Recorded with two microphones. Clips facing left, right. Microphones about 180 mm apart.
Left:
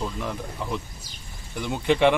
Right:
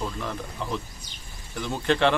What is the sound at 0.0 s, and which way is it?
Speech, 10° left (ahead or behind).